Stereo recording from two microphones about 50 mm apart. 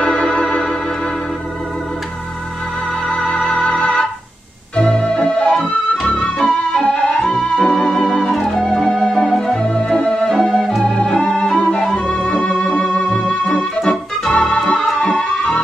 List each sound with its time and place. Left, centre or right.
0.0 s organ: centre
3.1 s music: centre
3.6 s organ: left
4.7 s music: centre
8.3 s music: centre
9.0 s organ: left
9.5 s music: centre
10.8 s organ: centre
13.7 s music: centre
14.3 s organ: centre
15.0 s music: centre